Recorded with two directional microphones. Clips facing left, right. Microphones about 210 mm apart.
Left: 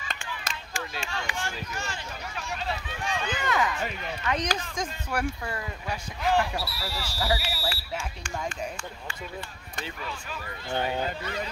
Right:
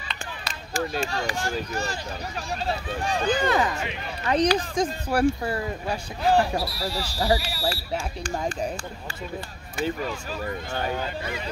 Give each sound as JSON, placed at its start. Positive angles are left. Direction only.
{"t": 0.7, "sound": "speech", "side_deg": -40}
{"t": 9.8, "sound": "speech", "side_deg": -40}